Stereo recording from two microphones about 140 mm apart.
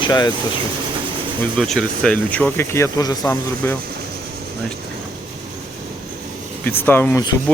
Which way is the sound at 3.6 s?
15° left (ahead or behind).